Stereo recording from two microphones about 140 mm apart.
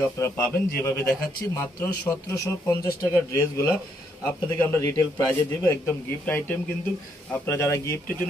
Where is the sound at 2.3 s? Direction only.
20° left (ahead or behind).